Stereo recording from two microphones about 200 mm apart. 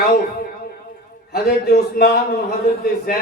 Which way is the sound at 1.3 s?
50° left (ahead or behind).